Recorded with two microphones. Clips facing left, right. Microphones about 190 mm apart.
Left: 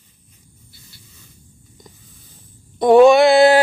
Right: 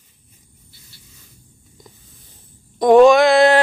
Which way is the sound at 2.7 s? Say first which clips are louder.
Even; 5° left (ahead or behind).